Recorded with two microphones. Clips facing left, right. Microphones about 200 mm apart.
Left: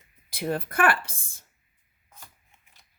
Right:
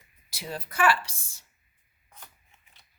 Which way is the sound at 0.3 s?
55° left (ahead or behind).